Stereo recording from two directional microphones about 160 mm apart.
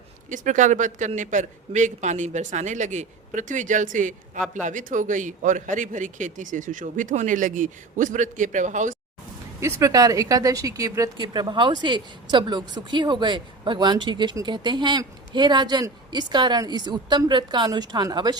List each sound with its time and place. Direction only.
0.3 s a man's voice: 50° right (ahead or behind)
9.6 s speech: 20° right (ahead or behind)